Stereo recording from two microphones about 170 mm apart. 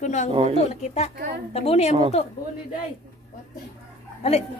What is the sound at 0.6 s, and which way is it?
A woman's voice, 40° left (ahead or behind).